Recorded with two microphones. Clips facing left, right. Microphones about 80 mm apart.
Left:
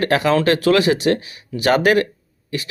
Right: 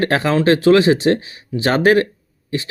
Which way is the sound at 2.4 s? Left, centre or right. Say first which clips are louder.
Right 3 dB; right.